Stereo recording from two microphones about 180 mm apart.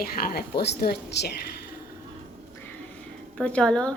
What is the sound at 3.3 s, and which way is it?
Speech, 5° left (ahead or behind).